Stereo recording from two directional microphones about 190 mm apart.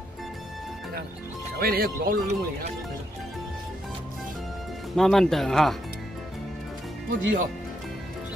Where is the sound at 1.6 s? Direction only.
50° right (ahead or behind).